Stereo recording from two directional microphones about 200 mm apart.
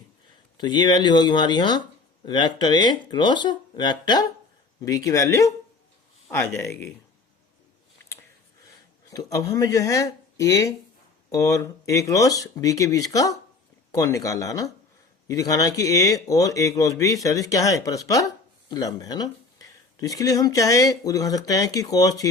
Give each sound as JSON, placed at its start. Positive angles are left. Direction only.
{"t": 0.5, "sound": "speech", "side_deg": 20}
{"t": 9.0, "sound": "speech", "side_deg": 15}